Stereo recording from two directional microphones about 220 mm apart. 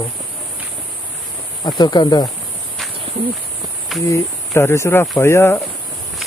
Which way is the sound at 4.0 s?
10° left (ahead or behind).